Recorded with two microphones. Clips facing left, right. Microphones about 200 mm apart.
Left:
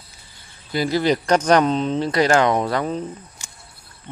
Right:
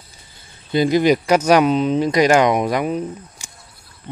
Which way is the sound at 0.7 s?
20° right (ahead or behind).